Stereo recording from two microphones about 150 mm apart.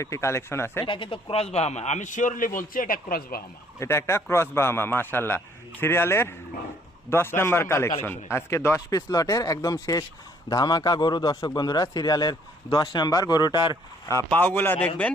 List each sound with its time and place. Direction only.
0.0 s a man's voice: 20° left (ahead or behind)
0.9 s a man's voice: 35° left (ahead or behind); by 3.4 s 85° left
3.8 s a man's voice: 15° left (ahead or behind)
14.3 s a man's voice: 15° left (ahead or behind)